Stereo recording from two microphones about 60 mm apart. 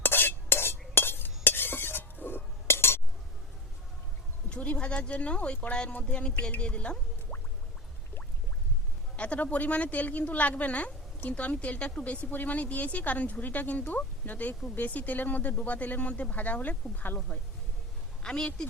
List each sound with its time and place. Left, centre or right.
0.0 s stir: left
4.4 s speech: centre
9.1 s speech: left
18.2 s speech: centre